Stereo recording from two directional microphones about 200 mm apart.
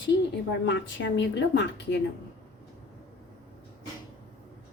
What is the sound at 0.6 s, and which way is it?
A woman's voice, 60° left (ahead or behind).